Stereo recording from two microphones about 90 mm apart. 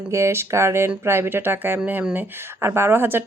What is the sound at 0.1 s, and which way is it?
Speech, 30° right (ahead or behind).